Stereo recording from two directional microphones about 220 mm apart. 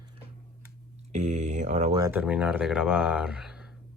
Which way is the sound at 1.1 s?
30° right (ahead or behind).